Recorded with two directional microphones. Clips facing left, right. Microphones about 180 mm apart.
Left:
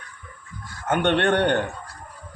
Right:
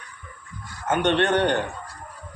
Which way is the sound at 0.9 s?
55° left (ahead or behind).